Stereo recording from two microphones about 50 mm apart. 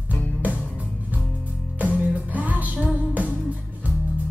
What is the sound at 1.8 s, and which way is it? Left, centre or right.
Music, right.